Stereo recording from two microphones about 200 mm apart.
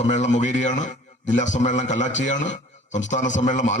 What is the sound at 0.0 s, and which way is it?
A man's voice, 35° left (ahead or behind).